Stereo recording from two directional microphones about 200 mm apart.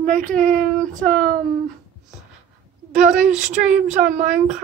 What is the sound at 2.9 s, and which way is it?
Speech, 40° right (ahead or behind).